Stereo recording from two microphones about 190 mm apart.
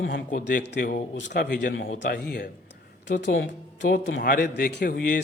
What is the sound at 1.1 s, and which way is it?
Speech, 65° left (ahead or behind).